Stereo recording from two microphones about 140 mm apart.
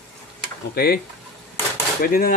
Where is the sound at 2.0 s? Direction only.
90° left.